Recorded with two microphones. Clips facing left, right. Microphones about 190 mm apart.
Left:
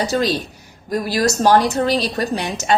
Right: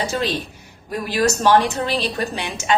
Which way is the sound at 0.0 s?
40° left (ahead or behind).